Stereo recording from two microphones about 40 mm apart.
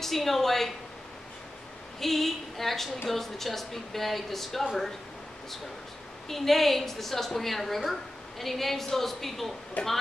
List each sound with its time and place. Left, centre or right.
0.0 s a woman's voice: centre
2.0 s a woman's voice: centre
6.2 s a woman's voice: centre
9.8 s speech: left